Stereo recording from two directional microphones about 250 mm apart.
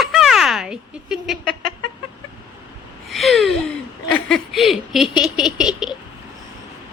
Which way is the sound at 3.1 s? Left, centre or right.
Centre.